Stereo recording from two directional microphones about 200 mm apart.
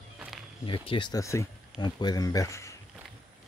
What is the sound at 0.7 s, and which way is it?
Speech, 25° left (ahead or behind).